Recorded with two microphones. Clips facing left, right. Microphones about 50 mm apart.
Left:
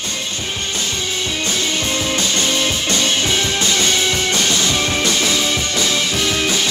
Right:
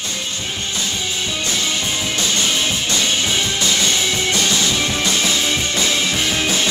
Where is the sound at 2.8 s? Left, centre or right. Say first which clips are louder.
Left 1 dB; left.